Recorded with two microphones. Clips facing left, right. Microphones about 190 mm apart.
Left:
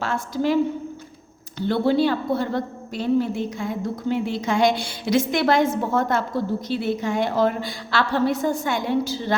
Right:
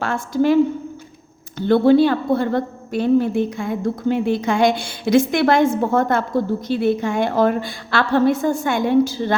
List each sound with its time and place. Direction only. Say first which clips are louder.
0.0 s a woman's voice: right 5 dB; 55° right (ahead or behind)